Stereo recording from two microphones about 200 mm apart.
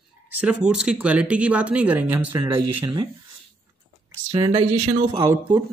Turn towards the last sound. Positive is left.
turn(degrees=-25)  # may be behind; listen again after turning